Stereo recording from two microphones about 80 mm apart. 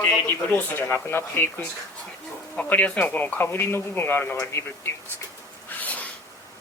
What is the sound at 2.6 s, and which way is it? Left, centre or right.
Speech, centre.